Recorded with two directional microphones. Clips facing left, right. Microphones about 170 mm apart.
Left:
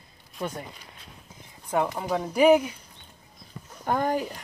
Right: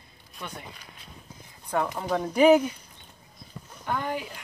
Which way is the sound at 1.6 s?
10° left (ahead or behind).